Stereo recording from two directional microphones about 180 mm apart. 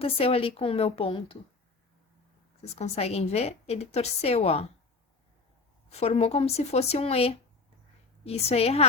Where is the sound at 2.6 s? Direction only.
35° left (ahead or behind).